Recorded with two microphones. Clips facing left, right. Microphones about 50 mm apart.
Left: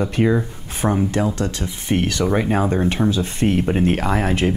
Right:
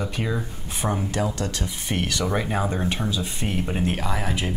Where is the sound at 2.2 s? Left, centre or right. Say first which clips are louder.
Left 5 dB; centre.